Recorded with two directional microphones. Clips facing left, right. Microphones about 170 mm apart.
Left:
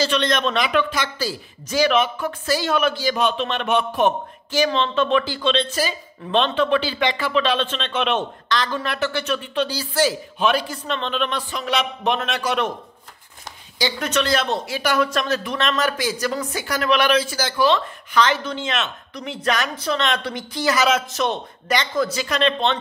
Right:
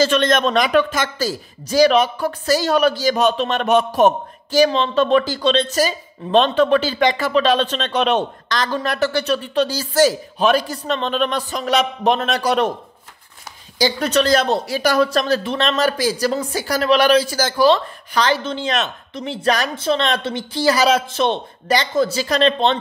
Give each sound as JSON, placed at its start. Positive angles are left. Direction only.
{"t": 0.0, "sound": "a man's voice", "side_deg": -50}
{"t": 13.7, "sound": "a man's voice", "side_deg": -35}